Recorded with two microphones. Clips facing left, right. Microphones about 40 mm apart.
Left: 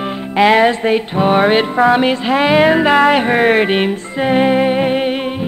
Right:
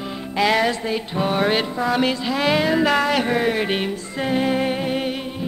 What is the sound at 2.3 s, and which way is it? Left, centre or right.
Music, left.